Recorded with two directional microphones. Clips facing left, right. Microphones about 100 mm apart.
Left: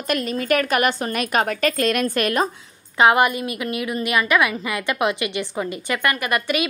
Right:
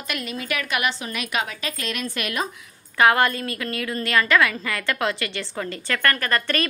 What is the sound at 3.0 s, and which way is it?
A woman's voice, 20° left (ahead or behind).